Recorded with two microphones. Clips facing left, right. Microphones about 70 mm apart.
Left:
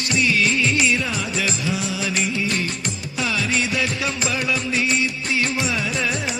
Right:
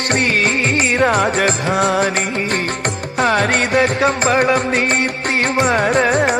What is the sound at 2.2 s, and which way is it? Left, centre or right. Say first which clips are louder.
Music: right 4 dB; right.